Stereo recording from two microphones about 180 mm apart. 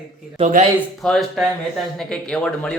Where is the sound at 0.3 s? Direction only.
40° right (ahead or behind).